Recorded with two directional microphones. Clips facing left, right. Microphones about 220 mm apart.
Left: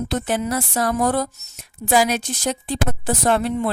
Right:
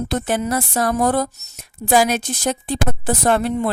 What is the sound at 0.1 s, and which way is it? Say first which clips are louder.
A woman's voice: right 2 dB; 50° right (ahead or behind).